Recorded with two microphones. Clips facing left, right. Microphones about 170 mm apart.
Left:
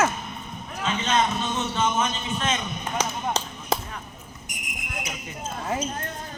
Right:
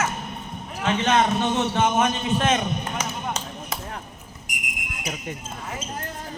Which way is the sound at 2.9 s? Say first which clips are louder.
Left 2 dB; 35° left (ahead or behind).